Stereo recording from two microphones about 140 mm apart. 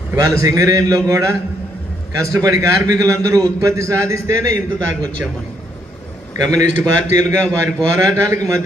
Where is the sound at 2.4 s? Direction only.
25° right (ahead or behind).